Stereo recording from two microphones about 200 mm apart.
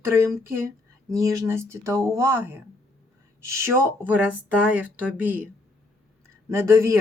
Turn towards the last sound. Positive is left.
turn(degrees=-15)  # may be behind; listen again after turning